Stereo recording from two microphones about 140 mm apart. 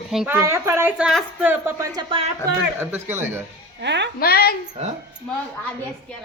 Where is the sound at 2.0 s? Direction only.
30° right (ahead or behind).